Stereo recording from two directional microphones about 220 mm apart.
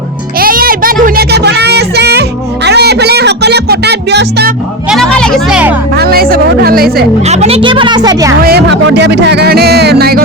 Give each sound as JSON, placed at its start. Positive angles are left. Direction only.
{"t": 0.3, "sound": "a sound", "side_deg": -40}
{"t": 2.6, "sound": "music", "side_deg": -50}
{"t": 4.9, "sound": "speech", "side_deg": 0}
{"t": 5.9, "sound": "speech", "side_deg": -45}
{"t": 7.3, "sound": "speech", "side_deg": -30}
{"t": 8.4, "sound": "speech", "side_deg": -45}